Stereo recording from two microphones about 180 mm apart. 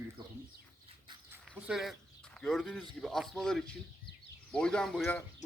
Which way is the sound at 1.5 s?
Centre (ahead or behind).